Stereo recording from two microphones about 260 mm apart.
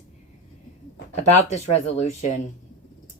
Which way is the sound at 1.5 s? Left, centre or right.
Left.